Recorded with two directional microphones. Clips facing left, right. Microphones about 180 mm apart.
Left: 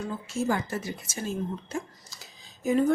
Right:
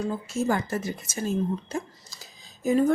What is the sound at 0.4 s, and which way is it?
Speech, 45° right (ahead or behind).